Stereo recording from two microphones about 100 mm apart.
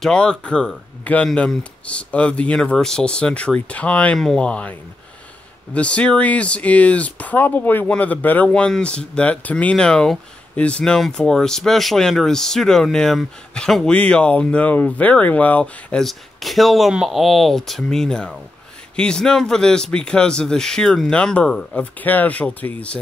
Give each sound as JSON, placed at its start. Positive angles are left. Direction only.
{"t": 0.0, "sound": "speech", "side_deg": 10}